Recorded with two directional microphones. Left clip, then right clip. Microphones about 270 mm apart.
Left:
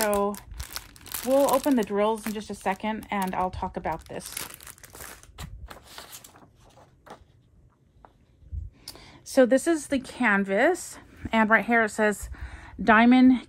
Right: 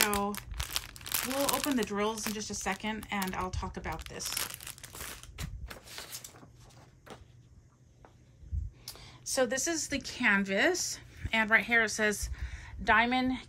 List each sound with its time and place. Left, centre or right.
0.3 s crumpling: centre
1.8 s speech: centre
4.2 s crumpling: centre
4.8 s crushing: centre
5.3 s a sound: centre
8.8 s speech: left